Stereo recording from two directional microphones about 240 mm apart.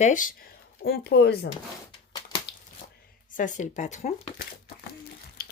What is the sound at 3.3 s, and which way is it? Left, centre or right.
Speech, left.